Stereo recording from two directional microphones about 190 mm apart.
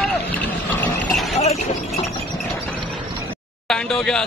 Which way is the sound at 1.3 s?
35° left (ahead or behind).